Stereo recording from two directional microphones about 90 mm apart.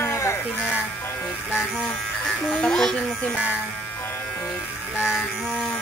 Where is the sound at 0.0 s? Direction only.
30° left (ahead or behind).